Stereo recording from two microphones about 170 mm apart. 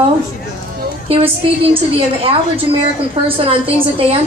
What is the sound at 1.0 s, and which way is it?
Speech, 35° right (ahead or behind).